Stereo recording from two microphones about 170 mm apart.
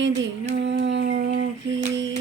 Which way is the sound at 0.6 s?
90° right.